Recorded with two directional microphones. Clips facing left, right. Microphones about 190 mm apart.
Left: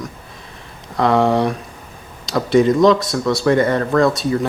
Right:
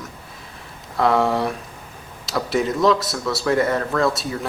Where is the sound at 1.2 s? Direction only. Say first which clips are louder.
Left 5 dB; 20° left (ahead or behind).